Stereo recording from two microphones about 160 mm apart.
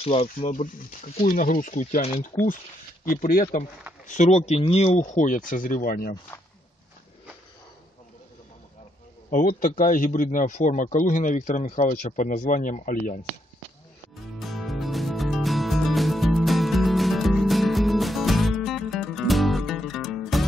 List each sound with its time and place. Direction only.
0.0 s speech: 40° left (ahead or behind)
0.5 s speech: 55° left (ahead or behind)
3.1 s speech: 60° left (ahead or behind)
4.1 s speech: 50° left (ahead or behind); by 6.1 s 65° left (ahead or behind)
9.3 s speech: 55° left (ahead or behind)
14.4 s music: centre (ahead or behind)